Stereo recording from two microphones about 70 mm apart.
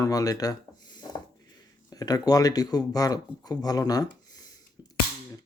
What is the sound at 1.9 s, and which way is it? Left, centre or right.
Speech, left.